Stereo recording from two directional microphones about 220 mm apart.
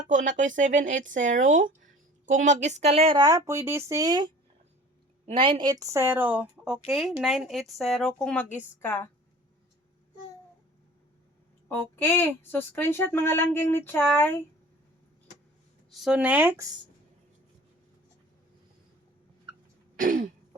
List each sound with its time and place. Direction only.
0.1 s a woman's voice: 35° right (ahead or behind); by 9.0 s 10° left (ahead or behind)
11.7 s a woman's voice: 10° left (ahead or behind)
15.9 s speech: centre (ahead or behind)
20.0 s speech: 35° right (ahead or behind)